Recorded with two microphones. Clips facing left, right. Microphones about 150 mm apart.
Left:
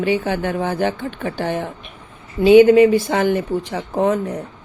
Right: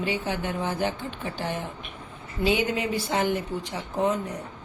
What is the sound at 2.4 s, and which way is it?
Speech, 85° left.